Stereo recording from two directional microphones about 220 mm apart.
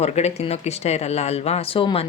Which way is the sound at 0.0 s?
30° left (ahead or behind).